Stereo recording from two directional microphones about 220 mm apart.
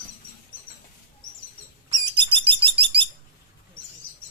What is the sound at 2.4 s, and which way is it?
Bird, 25° right (ahead or behind).